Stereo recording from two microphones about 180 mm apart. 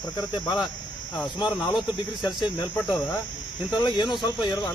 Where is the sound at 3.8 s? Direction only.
25° left (ahead or behind).